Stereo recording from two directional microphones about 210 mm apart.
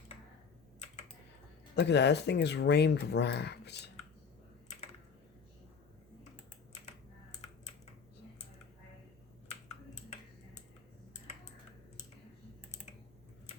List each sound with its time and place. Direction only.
1.7 s speech: 55° left (ahead or behind)
6.8 s typing: 35° left (ahead or behind)